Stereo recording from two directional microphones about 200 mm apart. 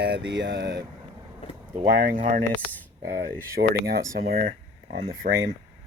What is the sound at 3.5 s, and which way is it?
Speech, 50° right (ahead or behind).